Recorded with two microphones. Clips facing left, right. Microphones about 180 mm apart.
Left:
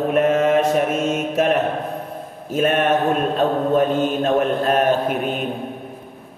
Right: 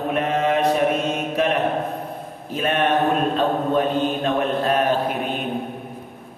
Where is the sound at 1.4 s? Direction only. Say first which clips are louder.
Left 3 dB; 45° left (ahead or behind).